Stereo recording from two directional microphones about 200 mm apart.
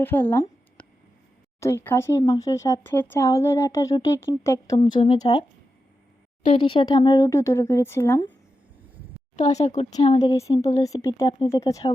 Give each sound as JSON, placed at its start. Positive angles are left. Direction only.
{"t": 0.0, "sound": "a sound", "side_deg": 10}
{"t": 1.6, "sound": "speech", "side_deg": 10}
{"t": 4.8, "sound": "speech", "side_deg": 25}
{"t": 6.5, "sound": "speech", "side_deg": 25}
{"t": 9.4, "sound": "speech", "side_deg": 35}
{"t": 10.8, "sound": "speech", "side_deg": 15}